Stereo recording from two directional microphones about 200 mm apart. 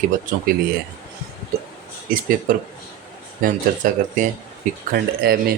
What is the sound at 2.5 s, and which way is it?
Speech, 45° right (ahead or behind).